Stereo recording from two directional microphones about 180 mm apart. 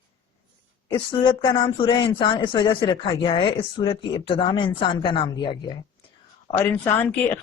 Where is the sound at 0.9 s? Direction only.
30° left (ahead or behind).